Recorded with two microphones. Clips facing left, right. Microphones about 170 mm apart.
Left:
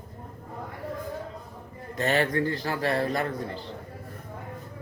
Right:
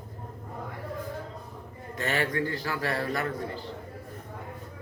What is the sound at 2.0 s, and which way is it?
Speech, 35° left (ahead or behind).